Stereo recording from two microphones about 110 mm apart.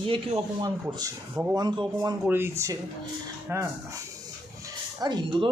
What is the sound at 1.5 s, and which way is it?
Speech, 40° right (ahead or behind).